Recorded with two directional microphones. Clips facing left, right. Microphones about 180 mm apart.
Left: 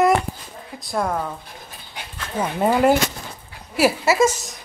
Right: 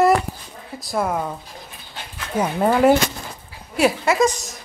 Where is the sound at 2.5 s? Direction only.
5° left (ahead or behind).